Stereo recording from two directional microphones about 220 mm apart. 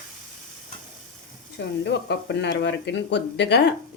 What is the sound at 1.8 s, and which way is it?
Speech, 50° left (ahead or behind).